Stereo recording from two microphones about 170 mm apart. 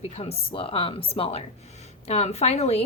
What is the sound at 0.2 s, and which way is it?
Speech, 35° left (ahead or behind).